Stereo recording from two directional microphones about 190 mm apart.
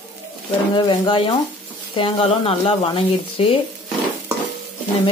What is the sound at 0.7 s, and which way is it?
Speech, 25° left (ahead or behind).